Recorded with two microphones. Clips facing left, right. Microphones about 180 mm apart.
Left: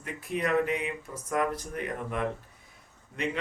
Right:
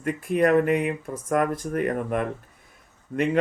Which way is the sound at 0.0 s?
55° right (ahead or behind).